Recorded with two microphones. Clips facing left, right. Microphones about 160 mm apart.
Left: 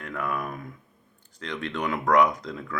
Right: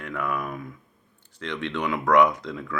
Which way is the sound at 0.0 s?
40° left (ahead or behind).